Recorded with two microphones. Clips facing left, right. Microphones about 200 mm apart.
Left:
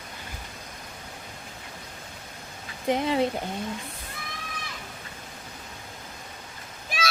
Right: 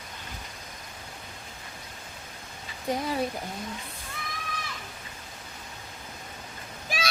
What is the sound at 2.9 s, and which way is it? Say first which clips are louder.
Speech: left 5 dB; 25° left (ahead or behind).